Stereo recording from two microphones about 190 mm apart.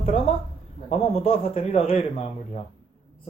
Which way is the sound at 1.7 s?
30° left (ahead or behind).